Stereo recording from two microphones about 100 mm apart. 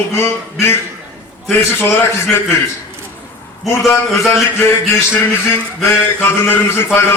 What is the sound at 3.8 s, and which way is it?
A man's voice, 30° left (ahead or behind).